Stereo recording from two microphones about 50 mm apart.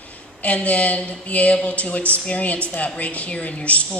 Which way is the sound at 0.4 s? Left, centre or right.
Left.